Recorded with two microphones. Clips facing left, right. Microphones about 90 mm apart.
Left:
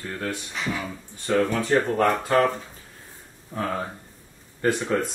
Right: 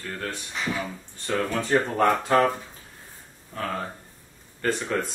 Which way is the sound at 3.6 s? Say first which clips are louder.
Left 2 dB; 15° left (ahead or behind).